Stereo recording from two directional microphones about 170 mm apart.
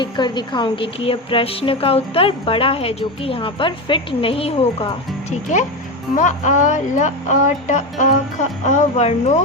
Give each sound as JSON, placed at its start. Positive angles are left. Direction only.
{"t": 0.0, "sound": "a woman's voice", "side_deg": 25}
{"t": 5.3, "sound": "speech", "side_deg": 45}